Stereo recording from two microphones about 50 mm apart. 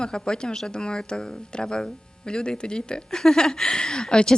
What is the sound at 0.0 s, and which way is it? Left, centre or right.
Speech, centre.